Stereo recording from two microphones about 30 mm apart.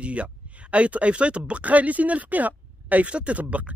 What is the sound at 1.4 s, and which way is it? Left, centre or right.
Speech, right.